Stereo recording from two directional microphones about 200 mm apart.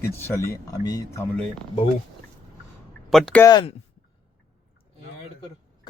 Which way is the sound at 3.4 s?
20° left (ahead or behind).